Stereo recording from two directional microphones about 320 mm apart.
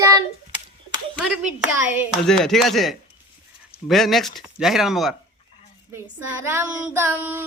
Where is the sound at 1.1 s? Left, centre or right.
Centre.